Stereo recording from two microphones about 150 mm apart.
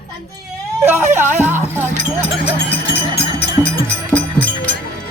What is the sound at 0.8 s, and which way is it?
Speech, 15° right (ahead or behind).